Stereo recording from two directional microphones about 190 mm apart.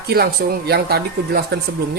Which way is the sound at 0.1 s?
55° right (ahead or behind).